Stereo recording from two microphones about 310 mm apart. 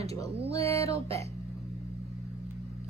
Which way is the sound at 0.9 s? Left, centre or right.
Centre.